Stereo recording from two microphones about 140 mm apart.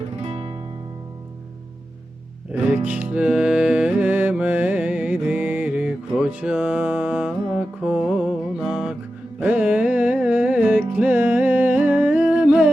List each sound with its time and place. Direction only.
0.2 s music: 40° right (ahead or behind)
2.5 s music: 15° right (ahead or behind)